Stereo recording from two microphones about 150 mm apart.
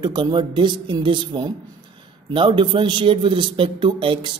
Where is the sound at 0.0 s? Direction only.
30° right (ahead or behind).